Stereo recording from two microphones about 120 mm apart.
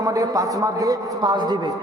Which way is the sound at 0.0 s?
30° right (ahead or behind).